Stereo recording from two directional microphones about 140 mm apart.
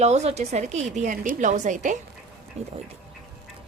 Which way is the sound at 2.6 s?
50° right (ahead or behind).